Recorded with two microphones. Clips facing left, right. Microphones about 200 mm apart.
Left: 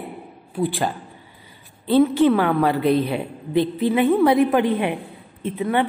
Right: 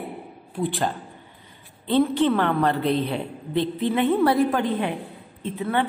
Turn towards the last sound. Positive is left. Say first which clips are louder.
# left 3 dB
turn(degrees=15)  # may be behind; listen again after turning